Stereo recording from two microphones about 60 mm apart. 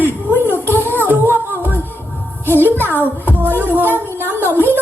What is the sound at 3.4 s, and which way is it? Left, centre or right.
A woman's voice, right.